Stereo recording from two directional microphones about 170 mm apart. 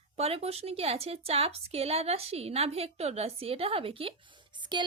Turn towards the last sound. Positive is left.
turn(degrees=-25)  # may be behind; listen again after turning